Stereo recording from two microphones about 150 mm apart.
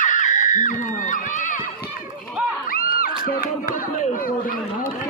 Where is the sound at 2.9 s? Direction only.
75° left (ahead or behind).